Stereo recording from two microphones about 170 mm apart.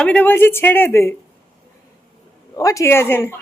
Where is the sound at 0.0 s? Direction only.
5° left (ahead or behind).